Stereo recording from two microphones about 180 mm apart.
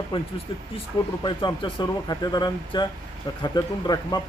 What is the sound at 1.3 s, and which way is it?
Speech, 25° left (ahead or behind).